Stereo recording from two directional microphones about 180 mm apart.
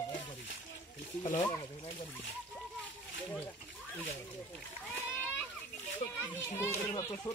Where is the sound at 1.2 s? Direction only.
30° left (ahead or behind).